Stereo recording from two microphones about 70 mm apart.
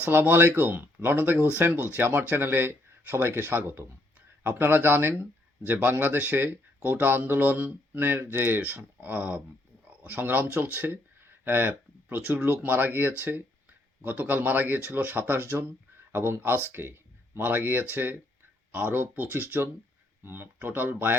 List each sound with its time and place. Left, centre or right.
0.0 s speech: right